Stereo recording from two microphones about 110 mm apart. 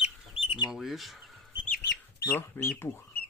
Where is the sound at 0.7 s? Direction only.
5° right (ahead or behind).